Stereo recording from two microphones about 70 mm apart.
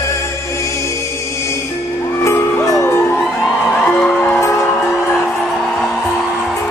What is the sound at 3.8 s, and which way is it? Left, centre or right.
Music, centre.